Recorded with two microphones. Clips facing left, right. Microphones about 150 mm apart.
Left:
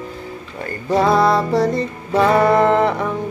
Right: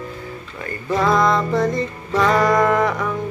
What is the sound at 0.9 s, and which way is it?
Music, 35° left (ahead or behind).